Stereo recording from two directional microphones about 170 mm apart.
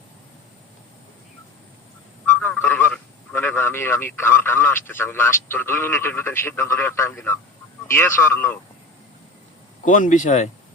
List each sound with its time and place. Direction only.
2.4 s a man's voice: 10° left (ahead or behind)
9.8 s a man's voice: 45° left (ahead or behind)